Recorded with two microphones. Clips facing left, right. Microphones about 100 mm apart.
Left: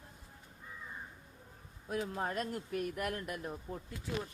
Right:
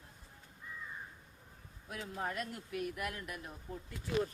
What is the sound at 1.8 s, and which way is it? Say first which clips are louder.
Speech: left 4 dB; 35° left (ahead or behind).